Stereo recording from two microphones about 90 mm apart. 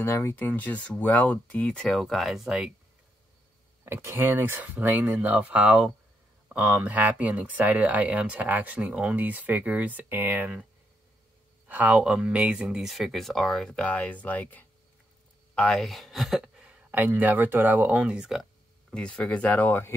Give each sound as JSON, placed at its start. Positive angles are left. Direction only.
{"t": 0.0, "sound": "speech", "side_deg": 30}
{"t": 3.8, "sound": "speech", "side_deg": -30}
{"t": 11.6, "sound": "speech", "side_deg": -20}
{"t": 15.8, "sound": "speech", "side_deg": 0}
{"t": 18.9, "sound": "speech", "side_deg": 10}